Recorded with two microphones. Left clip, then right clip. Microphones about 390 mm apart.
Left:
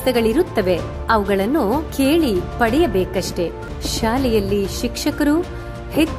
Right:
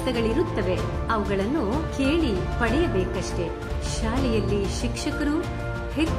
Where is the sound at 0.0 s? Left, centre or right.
Centre.